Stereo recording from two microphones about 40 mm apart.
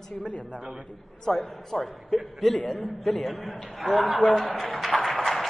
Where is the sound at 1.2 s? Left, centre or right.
Centre.